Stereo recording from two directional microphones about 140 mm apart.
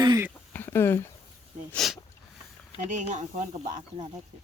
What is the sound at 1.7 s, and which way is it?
Speech, centre (ahead or behind).